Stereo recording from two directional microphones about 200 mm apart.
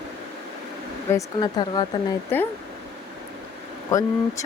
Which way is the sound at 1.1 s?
20° left (ahead or behind).